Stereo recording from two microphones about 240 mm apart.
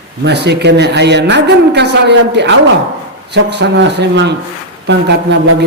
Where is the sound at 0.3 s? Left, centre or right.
Right.